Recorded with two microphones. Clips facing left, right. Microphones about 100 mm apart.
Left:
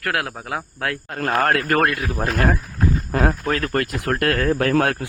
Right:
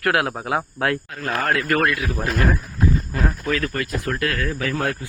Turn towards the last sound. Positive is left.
turn(degrees=65)  # may be behind; listen again after turning